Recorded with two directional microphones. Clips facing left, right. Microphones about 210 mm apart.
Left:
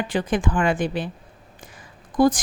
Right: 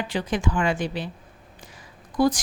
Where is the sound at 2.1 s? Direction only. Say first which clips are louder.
Left 3 dB; 50° left (ahead or behind).